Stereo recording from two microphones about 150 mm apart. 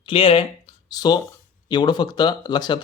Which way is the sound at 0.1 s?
40° left (ahead or behind).